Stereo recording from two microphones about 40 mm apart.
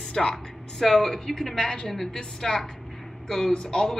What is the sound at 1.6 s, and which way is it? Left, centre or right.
A woman's voice, left.